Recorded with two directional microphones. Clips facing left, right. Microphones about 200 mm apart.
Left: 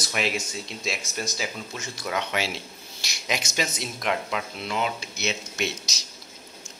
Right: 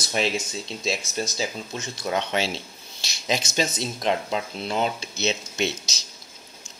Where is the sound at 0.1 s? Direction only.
30° right (ahead or behind).